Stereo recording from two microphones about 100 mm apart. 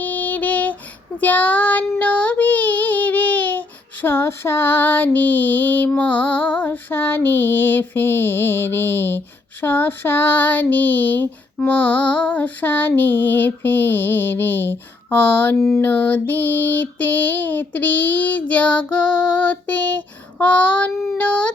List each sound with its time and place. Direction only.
0.0 s a sound: 15° left (ahead or behind)
1.2 s child singing: 15° left (ahead or behind)
15.8 s female singing: 15° left (ahead or behind)